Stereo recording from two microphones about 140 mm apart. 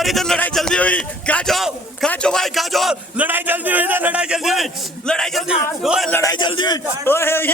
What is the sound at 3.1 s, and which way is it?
A man's voice, 10° right (ahead or behind).